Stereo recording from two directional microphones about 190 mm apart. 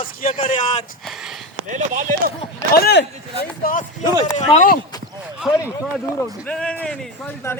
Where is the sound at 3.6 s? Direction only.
45° left (ahead or behind).